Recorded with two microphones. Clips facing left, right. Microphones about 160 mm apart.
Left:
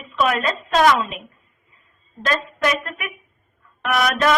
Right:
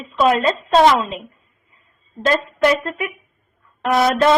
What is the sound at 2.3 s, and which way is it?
A woman's voice, 30° right (ahead or behind).